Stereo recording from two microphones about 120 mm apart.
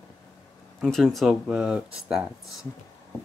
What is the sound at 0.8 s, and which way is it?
Speech, centre (ahead or behind).